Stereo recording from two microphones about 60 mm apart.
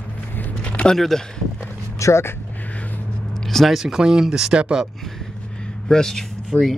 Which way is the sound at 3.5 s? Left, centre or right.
Centre.